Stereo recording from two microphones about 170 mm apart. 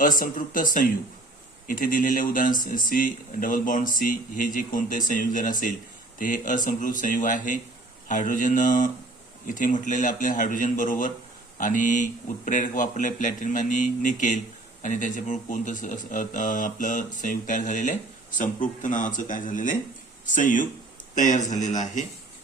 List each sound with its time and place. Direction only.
0.0 s a man's voice: 50° left (ahead or behind)